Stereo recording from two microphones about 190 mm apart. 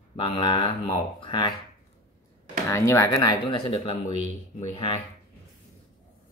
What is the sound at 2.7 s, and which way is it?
Speech, 15° left (ahead or behind).